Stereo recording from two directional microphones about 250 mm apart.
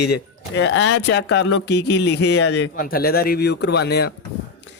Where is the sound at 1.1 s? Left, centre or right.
Left.